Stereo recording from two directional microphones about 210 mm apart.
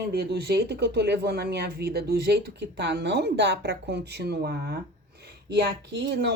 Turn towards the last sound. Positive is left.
turn(degrees=-55)  # may be behind; listen again after turning